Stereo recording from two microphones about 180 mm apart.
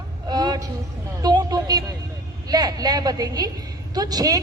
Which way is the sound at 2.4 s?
20° right (ahead or behind).